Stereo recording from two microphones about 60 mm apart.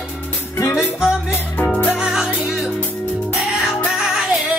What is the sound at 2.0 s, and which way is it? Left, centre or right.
Music, centre.